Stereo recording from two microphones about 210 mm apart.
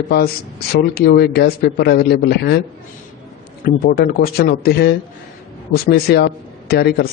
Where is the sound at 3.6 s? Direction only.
45° left (ahead or behind).